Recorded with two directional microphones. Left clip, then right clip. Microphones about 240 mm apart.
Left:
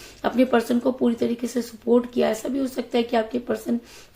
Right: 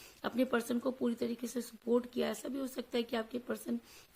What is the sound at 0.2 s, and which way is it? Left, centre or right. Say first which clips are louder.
A woman's voice: left 14 dB; right.